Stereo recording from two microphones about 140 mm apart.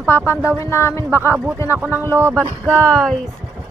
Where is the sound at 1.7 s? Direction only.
15° right (ahead or behind).